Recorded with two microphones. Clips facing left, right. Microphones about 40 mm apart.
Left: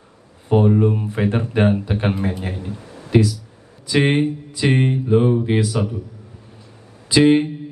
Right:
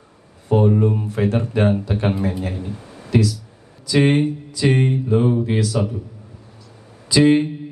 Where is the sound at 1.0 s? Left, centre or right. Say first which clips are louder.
Even; left.